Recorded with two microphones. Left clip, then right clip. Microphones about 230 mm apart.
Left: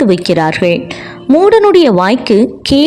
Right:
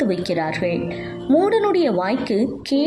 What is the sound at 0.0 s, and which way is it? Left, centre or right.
A woman's voice, left.